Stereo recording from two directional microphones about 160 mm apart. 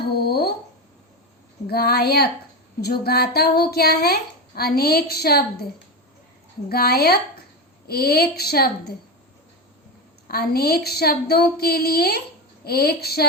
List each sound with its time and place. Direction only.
0.2 s a sound: 80° left
1.6 s speech: 75° left (ahead or behind)
6.7 s a woman's voice: 75° left (ahead or behind)
10.2 s a woman's voice: 75° left (ahead or behind)